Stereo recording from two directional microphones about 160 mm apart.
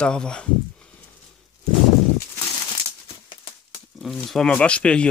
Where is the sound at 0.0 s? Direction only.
5° left (ahead or behind).